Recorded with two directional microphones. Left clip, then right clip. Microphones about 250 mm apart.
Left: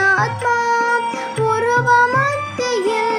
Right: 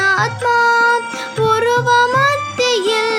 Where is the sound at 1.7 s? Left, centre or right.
Right.